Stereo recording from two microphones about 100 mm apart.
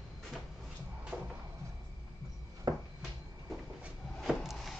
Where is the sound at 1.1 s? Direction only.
5° right (ahead or behind).